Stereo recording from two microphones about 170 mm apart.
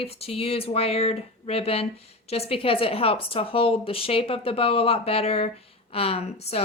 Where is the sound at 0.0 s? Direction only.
35° left (ahead or behind).